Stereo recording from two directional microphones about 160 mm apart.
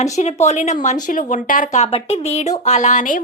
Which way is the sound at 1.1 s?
55° left (ahead or behind).